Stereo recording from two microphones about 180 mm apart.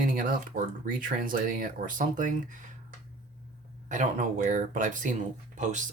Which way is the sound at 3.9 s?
45° right (ahead or behind).